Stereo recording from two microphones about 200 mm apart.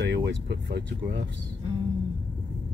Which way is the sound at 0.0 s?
60° right (ahead or behind).